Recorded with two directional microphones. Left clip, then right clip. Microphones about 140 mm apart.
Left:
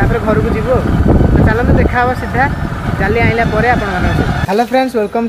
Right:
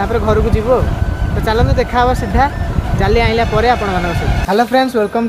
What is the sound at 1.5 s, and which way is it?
Speech, 25° right (ahead or behind).